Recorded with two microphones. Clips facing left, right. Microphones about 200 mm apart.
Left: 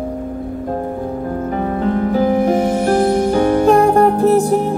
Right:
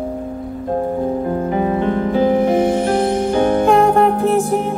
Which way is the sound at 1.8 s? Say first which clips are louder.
Left 3 dB; 40° left (ahead or behind).